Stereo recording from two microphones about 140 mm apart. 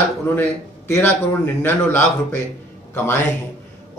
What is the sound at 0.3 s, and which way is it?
A man's voice, 15° left (ahead or behind).